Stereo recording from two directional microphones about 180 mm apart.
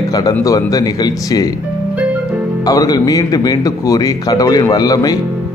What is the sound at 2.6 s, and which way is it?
A man's voice, 20° left (ahead or behind).